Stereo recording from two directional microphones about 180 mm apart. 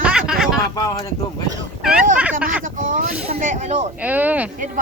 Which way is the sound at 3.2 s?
40° right (ahead or behind).